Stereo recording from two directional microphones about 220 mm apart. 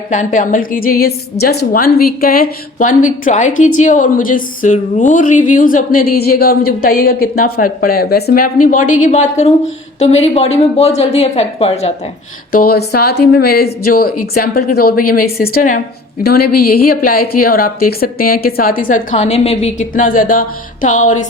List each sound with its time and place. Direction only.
0.1 s a woman's voice: 35° left (ahead or behind)
12.5 s a woman's voice: 40° left (ahead or behind)